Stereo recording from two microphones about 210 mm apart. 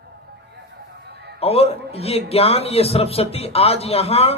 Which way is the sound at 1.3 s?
30° left (ahead or behind).